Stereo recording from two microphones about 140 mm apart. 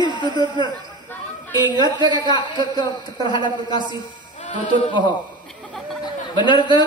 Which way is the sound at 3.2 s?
35° left (ahead or behind).